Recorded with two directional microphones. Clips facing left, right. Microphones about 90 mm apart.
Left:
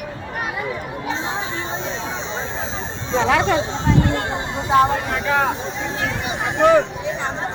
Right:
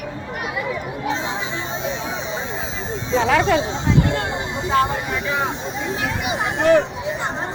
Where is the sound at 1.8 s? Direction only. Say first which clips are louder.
Right 1 dB; 15° right (ahead or behind).